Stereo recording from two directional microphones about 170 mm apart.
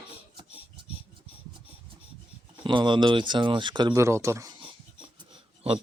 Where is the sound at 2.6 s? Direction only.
30° right (ahead or behind).